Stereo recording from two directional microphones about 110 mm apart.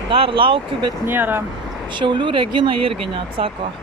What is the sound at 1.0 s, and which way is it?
Speech, 20° right (ahead or behind).